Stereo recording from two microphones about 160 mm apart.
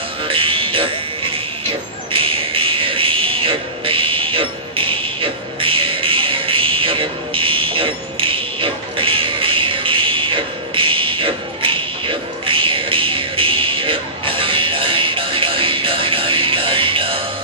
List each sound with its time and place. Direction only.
0.2 s music: 35° right (ahead or behind)